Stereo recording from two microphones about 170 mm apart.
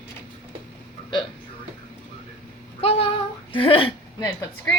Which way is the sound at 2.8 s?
35° left (ahead or behind).